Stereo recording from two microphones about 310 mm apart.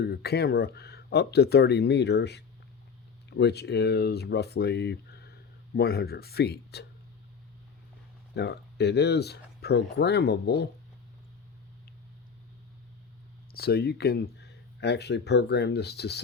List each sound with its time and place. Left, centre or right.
0.0 s speech: left
8.4 s speech: left
13.5 s speech: left